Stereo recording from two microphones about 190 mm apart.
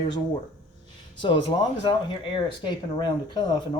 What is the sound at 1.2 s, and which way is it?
Speech, 25° left (ahead or behind).